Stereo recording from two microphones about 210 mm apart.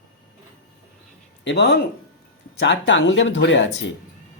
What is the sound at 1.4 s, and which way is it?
Speech, 55° left (ahead or behind).